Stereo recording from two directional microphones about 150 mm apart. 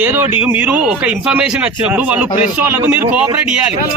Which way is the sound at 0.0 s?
10° right (ahead or behind).